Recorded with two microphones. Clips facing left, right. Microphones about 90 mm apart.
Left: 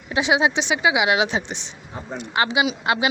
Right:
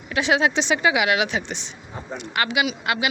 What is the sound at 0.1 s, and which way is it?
A woman's voice, 20° left (ahead or behind).